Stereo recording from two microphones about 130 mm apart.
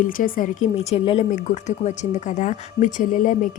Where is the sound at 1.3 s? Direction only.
65° left (ahead or behind).